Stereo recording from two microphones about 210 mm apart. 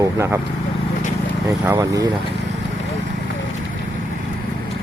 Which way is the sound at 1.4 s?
10° right (ahead or behind).